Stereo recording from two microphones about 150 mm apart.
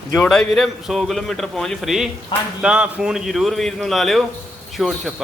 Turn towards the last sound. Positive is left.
turn(degrees=0)  # may be behind; listen again after turning